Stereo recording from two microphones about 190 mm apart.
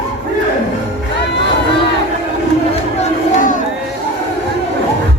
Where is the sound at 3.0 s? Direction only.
40° left (ahead or behind).